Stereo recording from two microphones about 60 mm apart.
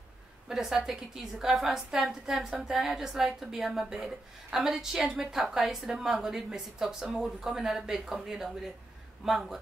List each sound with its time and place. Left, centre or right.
0.5 s a woman's voice: centre